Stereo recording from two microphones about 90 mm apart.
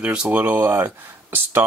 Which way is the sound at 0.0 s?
15° right (ahead or behind).